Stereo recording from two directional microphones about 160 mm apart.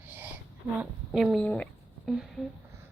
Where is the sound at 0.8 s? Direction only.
Centre (ahead or behind).